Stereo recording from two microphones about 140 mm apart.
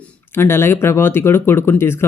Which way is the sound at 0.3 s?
15° left (ahead or behind).